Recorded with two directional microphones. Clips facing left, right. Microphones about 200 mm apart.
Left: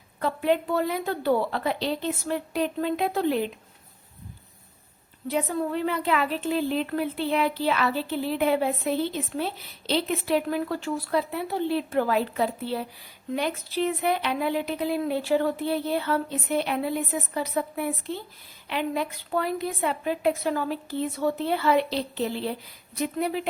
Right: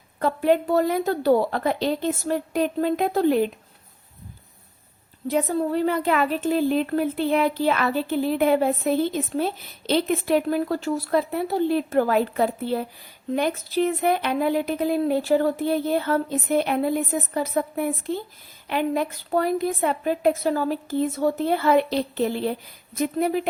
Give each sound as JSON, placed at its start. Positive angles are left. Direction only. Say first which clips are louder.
{"t": 0.2, "sound": "speech", "louder": "right 4 dB", "side_deg": -45}
{"t": 5.3, "sound": "speech", "louder": "right 4 dB", "side_deg": -45}